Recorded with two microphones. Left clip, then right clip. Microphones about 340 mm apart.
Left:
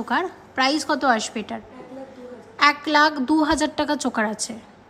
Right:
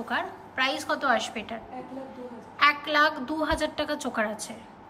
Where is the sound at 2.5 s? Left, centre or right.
Centre.